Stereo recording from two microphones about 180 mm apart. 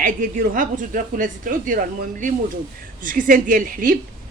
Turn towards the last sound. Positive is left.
turn(degrees=-50)  # may be behind; listen again after turning